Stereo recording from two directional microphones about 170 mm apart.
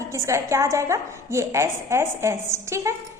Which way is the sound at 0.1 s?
20° right (ahead or behind).